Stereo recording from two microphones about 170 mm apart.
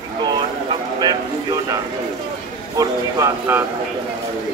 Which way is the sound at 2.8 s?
20° right (ahead or behind).